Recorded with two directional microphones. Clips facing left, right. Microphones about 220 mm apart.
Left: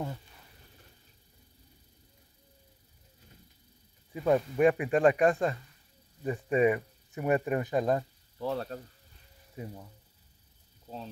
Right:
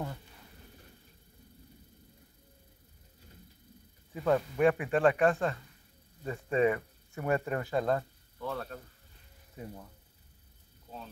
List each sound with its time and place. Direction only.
4.1 s speech: 15° left (ahead or behind)
8.4 s speech: 30° left (ahead or behind)